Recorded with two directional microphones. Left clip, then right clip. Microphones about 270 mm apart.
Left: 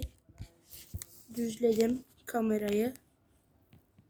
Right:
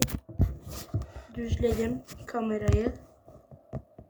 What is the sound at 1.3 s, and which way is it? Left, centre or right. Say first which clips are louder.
Speech: even; centre.